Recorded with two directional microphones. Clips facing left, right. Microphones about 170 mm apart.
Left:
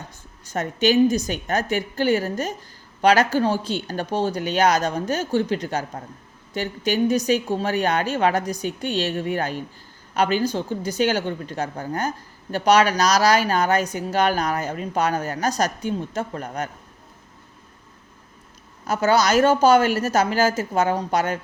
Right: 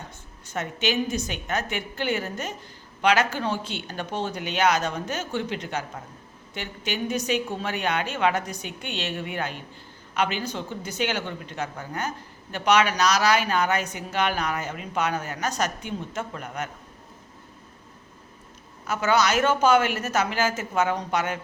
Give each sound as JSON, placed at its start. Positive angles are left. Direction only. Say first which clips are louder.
{"t": 0.4, "sound": "a woman's voice", "louder": "left 7 dB", "side_deg": 40}
{"t": 18.9, "sound": "speech", "louder": "left 4 dB", "side_deg": 35}